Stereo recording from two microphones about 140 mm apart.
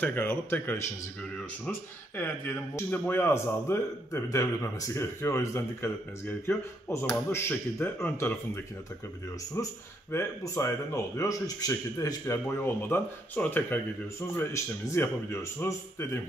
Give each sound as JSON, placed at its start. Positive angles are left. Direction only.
{"t": 0.0, "sound": "speech", "side_deg": 15}
{"t": 9.6, "sound": "a man's voice", "side_deg": 20}